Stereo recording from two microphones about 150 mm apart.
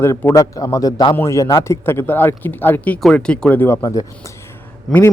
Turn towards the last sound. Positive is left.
turn(degrees=0)  # may be behind; listen again after turning